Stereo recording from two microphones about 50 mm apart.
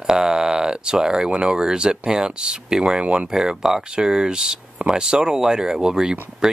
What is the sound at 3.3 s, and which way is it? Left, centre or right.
Speech, centre.